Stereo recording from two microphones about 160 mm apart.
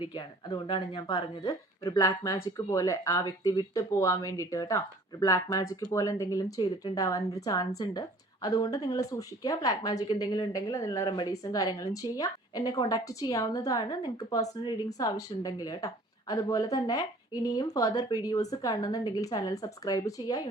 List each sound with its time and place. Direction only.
0.0 s speech: 30° left (ahead or behind)